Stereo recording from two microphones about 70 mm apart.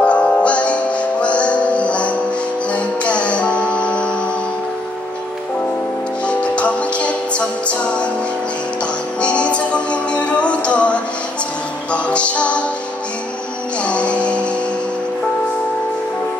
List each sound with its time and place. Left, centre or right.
0.0 s music: centre
6.2 s music: centre
9.2 s music: centre
13.8 s music: centre